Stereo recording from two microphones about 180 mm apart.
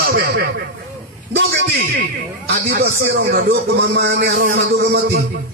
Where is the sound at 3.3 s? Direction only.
85° right; by 4.6 s 55° right (ahead or behind).